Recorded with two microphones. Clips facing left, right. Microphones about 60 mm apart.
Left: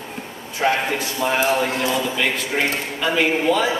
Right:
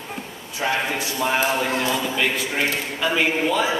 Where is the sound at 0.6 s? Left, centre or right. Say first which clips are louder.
Left 3 dB; left.